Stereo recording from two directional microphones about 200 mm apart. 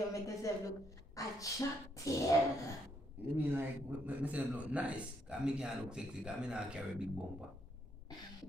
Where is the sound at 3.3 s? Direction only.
10° right (ahead or behind).